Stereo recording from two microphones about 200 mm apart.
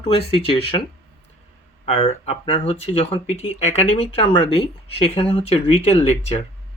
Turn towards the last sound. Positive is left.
turn(degrees=30)  # may be behind; listen again after turning